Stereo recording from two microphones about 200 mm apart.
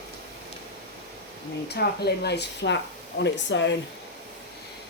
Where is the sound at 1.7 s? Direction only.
55° left (ahead or behind).